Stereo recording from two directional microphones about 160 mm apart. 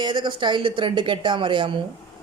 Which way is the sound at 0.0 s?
30° right (ahead or behind).